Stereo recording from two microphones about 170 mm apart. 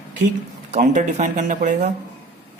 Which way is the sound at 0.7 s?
45° right (ahead or behind).